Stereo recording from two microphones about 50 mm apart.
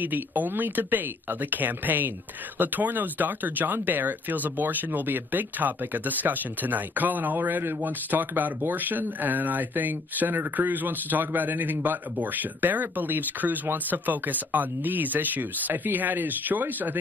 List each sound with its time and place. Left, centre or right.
0.0 s speech: right